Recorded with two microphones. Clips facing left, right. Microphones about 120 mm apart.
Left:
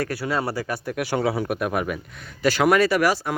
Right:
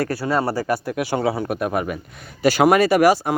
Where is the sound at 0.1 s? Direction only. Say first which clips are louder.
Right 4 dB; 30° right (ahead or behind).